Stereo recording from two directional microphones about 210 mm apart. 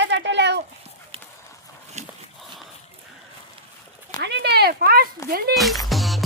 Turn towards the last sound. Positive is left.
turn(degrees=0)  # may be behind; listen again after turning